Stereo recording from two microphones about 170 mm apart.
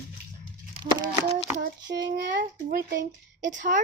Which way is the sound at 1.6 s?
50° right (ahead or behind).